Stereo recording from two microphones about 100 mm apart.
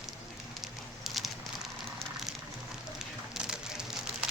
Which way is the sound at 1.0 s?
Centre (ahead or behind).